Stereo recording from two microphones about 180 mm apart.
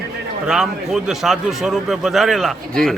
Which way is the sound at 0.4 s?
5° right (ahead or behind).